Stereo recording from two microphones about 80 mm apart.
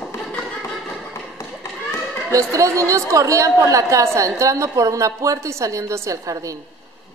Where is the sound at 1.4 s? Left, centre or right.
Left.